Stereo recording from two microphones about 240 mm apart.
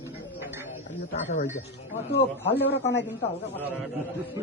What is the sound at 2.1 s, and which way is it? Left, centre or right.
Speech, left.